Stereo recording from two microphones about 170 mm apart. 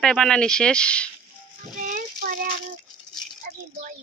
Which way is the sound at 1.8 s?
50° right (ahead or behind).